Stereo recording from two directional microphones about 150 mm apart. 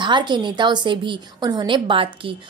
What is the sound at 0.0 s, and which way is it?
A woman's voice, 30° right (ahead or behind).